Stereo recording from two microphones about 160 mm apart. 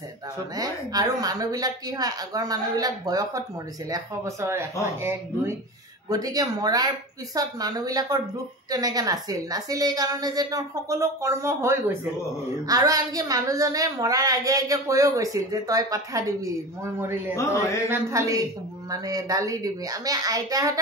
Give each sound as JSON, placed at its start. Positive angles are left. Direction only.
{"t": 0.6, "sound": "a woman's voice", "side_deg": -25}